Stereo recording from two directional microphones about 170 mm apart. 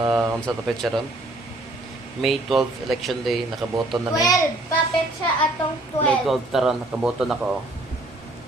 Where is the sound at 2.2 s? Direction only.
Centre (ahead or behind).